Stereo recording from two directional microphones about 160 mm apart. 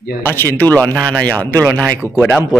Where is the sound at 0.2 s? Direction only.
15° left (ahead or behind).